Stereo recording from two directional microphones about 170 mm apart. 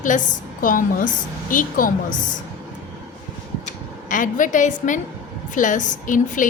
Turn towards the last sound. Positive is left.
turn(degrees=50)  # may be behind; listen again after turning